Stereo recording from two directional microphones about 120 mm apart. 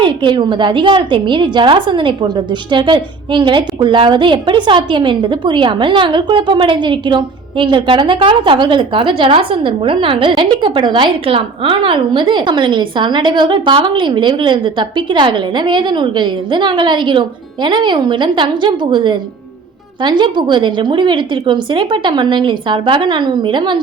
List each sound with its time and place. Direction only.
0.0 s a woman's voice: 40° right (ahead or behind)